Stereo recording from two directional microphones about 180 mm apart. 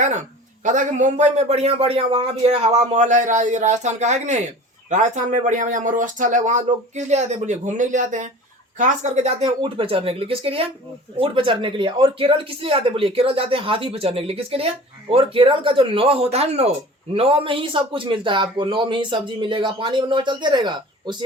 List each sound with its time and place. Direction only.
0.6 s a man's voice: 45° right (ahead or behind); by 21.2 s 25° right (ahead or behind)